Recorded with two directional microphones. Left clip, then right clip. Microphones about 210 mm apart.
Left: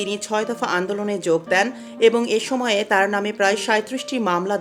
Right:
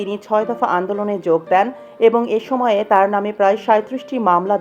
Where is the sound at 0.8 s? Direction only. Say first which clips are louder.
Right 3 dB; 10° left (ahead or behind).